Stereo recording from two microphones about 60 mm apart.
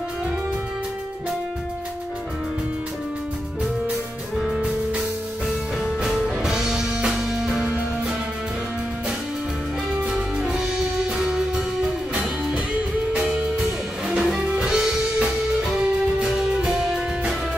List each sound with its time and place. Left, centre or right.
5.8 s music: centre
9.9 s music: centre
13.1 s music: right
13.6 s music: centre